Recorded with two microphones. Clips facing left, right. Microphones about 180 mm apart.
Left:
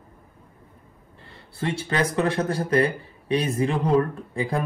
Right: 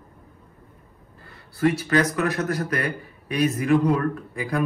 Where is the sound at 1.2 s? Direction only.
25° left (ahead or behind).